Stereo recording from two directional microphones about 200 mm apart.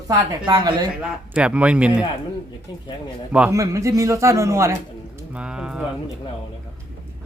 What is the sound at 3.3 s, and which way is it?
A man's voice, 5° right (ahead or behind).